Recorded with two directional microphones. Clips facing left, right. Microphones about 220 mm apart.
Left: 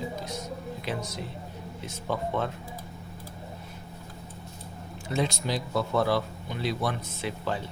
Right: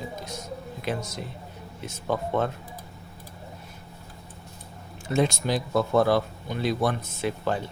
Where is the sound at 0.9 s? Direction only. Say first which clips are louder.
Right 4 dB; 50° right (ahead or behind).